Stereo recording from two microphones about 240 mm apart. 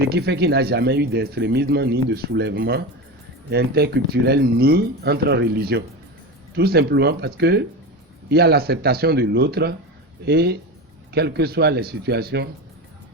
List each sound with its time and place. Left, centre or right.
0.1 s speech: right